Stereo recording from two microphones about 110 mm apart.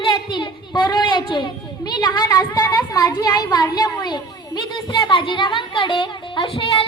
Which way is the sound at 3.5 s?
35° left (ahead or behind).